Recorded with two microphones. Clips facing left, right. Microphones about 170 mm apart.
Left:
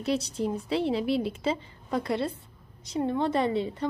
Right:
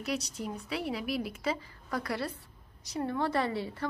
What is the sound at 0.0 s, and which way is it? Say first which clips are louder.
Speech: left 7 dB; 30° left (ahead or behind).